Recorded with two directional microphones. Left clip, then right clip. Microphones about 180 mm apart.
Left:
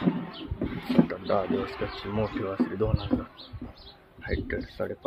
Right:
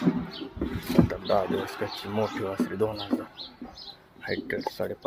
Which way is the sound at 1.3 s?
10° left (ahead or behind).